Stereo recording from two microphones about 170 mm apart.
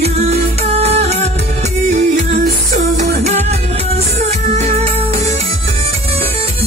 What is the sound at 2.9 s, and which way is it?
Music, 40° right (ahead or behind).